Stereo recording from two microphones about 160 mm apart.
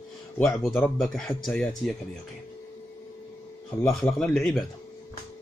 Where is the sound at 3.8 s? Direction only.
5° left (ahead or behind).